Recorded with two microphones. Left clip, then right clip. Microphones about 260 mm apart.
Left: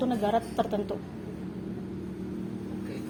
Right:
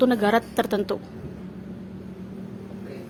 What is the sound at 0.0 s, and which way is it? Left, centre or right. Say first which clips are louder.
Speech: right 7 dB; right.